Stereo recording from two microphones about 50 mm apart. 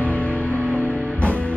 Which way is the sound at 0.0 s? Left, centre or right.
Left.